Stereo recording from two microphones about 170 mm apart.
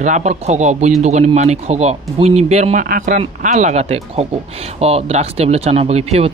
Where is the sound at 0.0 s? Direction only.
45° right (ahead or behind).